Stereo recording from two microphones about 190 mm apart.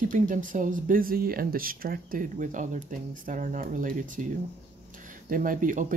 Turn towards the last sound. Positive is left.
turn(degrees=-45)  # may be behind; listen again after turning